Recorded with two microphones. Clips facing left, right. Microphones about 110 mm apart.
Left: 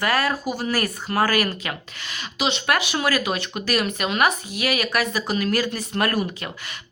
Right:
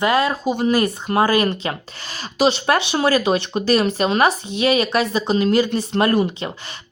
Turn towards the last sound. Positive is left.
turn(degrees=-25)  # may be behind; listen again after turning